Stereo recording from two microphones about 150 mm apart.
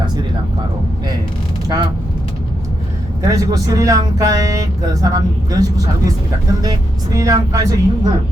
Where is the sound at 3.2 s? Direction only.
25° right (ahead or behind).